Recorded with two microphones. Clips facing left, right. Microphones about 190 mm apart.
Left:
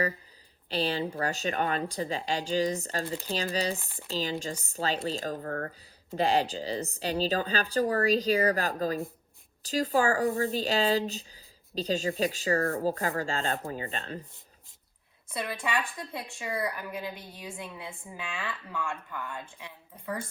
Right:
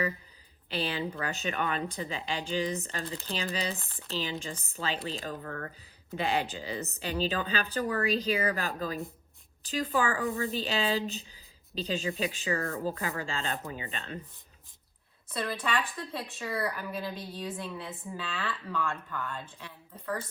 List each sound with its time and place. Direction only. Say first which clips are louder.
0.7 s a woman's voice: left 3 dB; 35° left (ahead or behind)
3.8 s a woman's voice: left 1 dB; 15° left (ahead or behind)
4.1 s a woman's voice: left 3 dB; 35° left (ahead or behind)
15.3 s a woman's voice: even; 15° left (ahead or behind)